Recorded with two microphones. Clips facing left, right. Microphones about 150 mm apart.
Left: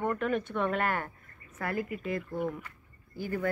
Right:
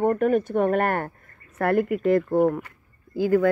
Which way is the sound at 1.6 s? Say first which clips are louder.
Right 12 dB; 70° right (ahead or behind).